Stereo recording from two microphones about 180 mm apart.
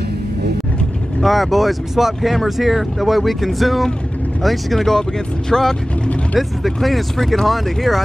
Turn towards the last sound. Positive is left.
turn(degrees=0)  # may be behind; listen again after turning